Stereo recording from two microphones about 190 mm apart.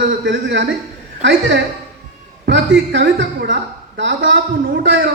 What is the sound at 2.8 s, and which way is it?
A woman's voice, 70° right (ahead or behind).